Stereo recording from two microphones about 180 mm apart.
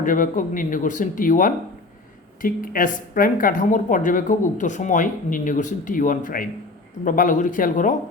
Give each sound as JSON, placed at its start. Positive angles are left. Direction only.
{"t": 0.0, "sound": "speech", "side_deg": 50}